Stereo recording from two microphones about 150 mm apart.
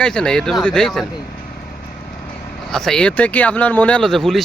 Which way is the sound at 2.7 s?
5° left (ahead or behind).